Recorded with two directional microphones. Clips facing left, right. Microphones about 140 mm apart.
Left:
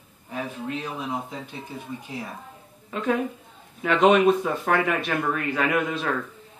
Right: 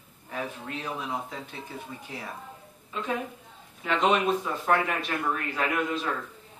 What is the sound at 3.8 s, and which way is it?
Speech, 65° left (ahead or behind).